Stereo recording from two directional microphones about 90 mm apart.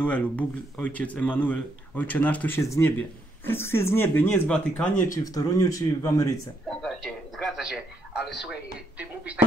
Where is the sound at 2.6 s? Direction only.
30° left (ahead or behind).